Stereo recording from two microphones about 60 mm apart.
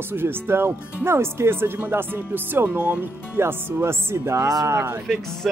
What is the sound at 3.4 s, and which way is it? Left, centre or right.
Speech, right.